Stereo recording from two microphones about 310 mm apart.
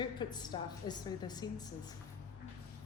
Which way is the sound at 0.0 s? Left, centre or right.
Centre.